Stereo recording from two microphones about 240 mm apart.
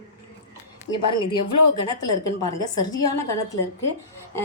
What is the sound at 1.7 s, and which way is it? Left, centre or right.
Speech, centre.